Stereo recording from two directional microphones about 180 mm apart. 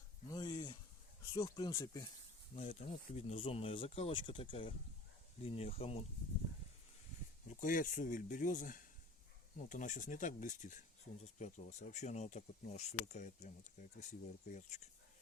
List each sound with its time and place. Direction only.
0.3 s a sound: 20° left (ahead or behind)
1.3 s speech: 25° left (ahead or behind)
2.6 s speech: 35° left (ahead or behind)
7.6 s speech: 50° left (ahead or behind)